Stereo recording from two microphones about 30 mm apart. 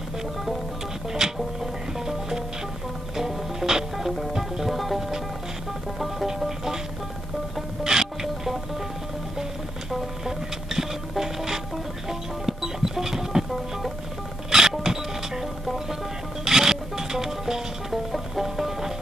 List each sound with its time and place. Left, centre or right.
1.1 s music: centre
4.7 s music: centre
7.8 s music: centre
9.4 s music: centre
14.5 s music: centre
16.4 s music: centre
17.9 s music: centre